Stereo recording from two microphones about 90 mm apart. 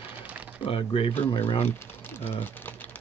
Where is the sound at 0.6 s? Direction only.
90° left.